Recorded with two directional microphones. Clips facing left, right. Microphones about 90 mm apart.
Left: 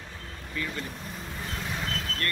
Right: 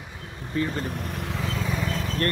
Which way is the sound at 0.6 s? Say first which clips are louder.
Right 7 dB; 35° right (ahead or behind).